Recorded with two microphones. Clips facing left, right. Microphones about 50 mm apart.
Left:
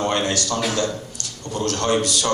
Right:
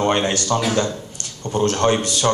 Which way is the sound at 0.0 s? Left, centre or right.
Right.